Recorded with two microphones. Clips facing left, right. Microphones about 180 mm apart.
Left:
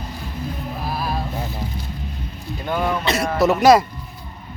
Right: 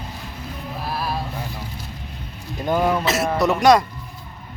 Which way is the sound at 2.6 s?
10° right (ahead or behind).